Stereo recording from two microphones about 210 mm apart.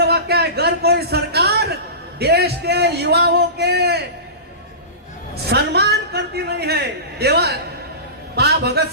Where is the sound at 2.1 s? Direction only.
50° right (ahead or behind).